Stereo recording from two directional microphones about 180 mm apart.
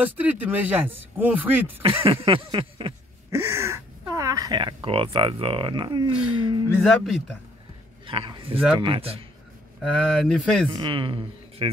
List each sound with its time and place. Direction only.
0.0 s speech: 10° right (ahead or behind)
2.0 s speech: 30° right (ahead or behind)
3.3 s speech: 15° right (ahead or behind)
6.8 s speech: centre (ahead or behind)
8.1 s speech: 30° right (ahead or behind)
9.8 s speech: centre (ahead or behind)
10.7 s speech: 30° right (ahead or behind)